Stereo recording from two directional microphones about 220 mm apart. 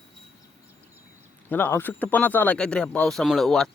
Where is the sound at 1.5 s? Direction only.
10° left (ahead or behind).